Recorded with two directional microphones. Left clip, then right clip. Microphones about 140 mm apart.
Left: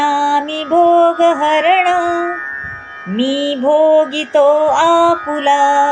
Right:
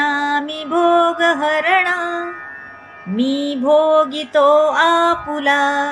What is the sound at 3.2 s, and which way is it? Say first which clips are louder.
Mantra: left 4 dB; 10° left (ahead or behind).